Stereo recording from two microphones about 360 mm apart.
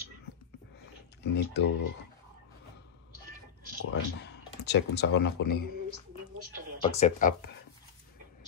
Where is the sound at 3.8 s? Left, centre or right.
Left.